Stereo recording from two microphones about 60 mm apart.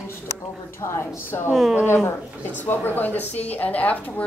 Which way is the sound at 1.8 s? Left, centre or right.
Left.